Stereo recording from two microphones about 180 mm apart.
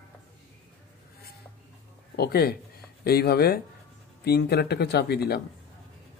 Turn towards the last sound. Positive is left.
turn(degrees=60)  # may be behind; listen again after turning